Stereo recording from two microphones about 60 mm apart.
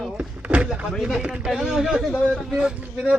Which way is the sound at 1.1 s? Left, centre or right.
Centre.